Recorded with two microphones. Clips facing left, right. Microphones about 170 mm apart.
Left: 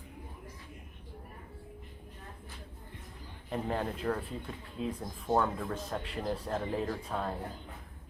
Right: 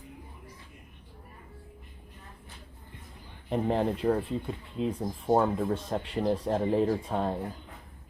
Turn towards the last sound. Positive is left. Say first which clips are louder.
# right 7 dB
turn(degrees=-30)  # may be behind; listen again after turning